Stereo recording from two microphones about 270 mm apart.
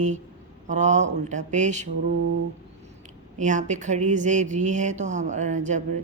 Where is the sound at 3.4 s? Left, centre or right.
Right.